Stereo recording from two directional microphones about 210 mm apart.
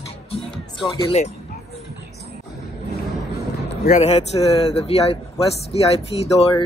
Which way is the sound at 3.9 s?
30° left (ahead or behind).